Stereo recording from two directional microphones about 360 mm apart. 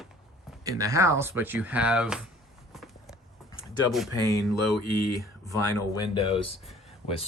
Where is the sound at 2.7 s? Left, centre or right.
Centre.